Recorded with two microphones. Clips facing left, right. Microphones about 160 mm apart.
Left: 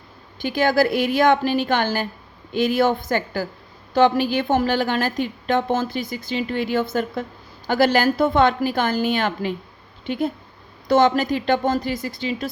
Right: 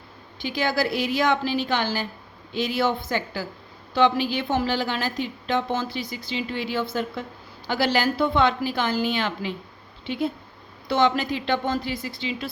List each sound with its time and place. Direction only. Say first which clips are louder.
0.3 s a woman's voice: left 6 dB; 50° left (ahead or behind)